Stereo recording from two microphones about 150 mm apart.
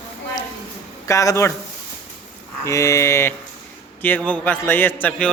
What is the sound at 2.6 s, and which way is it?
A man's voice, 20° left (ahead or behind).